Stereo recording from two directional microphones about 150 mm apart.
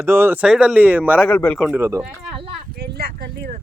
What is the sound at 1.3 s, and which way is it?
Speech, 10° left (ahead or behind).